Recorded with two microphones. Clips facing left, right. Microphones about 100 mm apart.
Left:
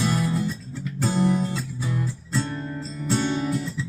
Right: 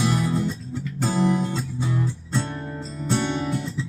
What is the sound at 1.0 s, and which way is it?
Music, 25° right (ahead or behind).